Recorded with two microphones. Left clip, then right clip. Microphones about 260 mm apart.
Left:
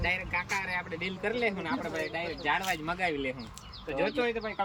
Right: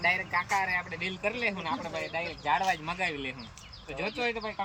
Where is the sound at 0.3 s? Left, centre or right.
Centre.